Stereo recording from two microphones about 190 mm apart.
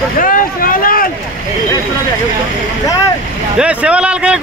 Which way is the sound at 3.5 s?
5° right (ahead or behind).